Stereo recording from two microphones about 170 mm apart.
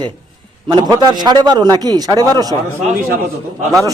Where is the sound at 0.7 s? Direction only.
25° right (ahead or behind).